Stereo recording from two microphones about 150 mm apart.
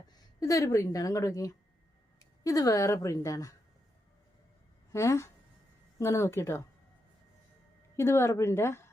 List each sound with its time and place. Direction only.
0.3 s a woman's voice: 20° left (ahead or behind)
4.9 s a woman's voice: 20° left (ahead or behind)
7.9 s a woman's voice: 20° left (ahead or behind)